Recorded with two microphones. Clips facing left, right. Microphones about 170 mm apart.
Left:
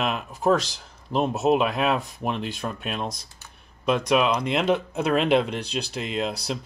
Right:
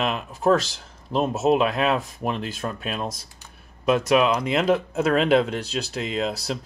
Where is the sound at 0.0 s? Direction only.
Centre (ahead or behind).